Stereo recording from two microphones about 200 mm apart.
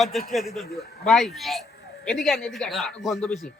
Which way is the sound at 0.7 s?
50° left (ahead or behind).